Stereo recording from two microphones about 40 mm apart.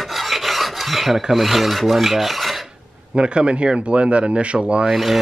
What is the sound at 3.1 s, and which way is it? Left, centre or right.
Speech, right.